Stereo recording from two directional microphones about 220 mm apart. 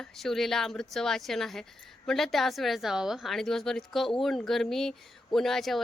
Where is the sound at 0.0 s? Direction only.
Centre (ahead or behind).